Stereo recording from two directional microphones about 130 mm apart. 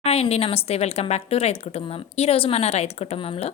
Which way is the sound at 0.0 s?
55° left (ahead or behind).